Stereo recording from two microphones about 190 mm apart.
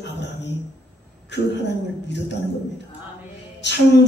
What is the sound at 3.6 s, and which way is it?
Music, 65° left (ahead or behind).